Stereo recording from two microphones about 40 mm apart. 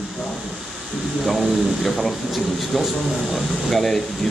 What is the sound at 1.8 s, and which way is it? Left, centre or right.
Speech, centre.